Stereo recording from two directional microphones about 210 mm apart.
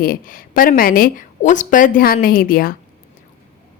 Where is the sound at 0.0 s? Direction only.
40° left (ahead or behind).